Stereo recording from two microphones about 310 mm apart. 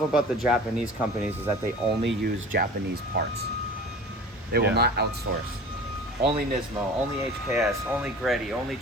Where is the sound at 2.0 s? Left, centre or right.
Right.